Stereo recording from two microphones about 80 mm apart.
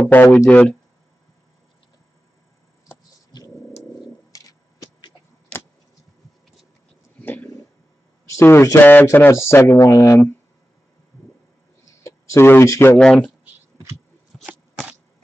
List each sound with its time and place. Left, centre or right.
0.0 s speech: left
3.3 s a sound: left
7.2 s a sound: left
8.3 s a man's voice: left
12.0 s speech: left
12.9 s speech: centre